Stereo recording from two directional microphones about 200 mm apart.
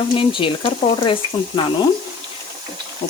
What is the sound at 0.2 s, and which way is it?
Speech, 25° left (ahead or behind).